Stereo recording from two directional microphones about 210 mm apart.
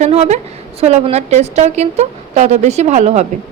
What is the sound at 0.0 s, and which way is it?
A woman's voice, 30° right (ahead or behind).